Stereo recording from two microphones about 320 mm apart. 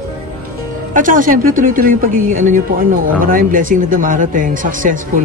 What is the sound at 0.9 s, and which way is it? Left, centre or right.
Speech, right.